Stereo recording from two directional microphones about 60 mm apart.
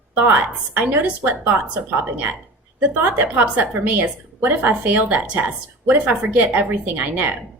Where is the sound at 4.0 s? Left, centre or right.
Right.